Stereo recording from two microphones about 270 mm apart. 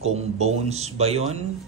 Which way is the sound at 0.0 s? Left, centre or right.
Right.